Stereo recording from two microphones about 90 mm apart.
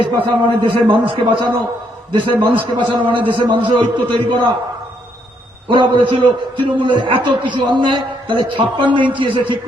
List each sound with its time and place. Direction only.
0.0 s a man's voice: 65° right (ahead or behind)
5.6 s a man's voice: 65° right (ahead or behind)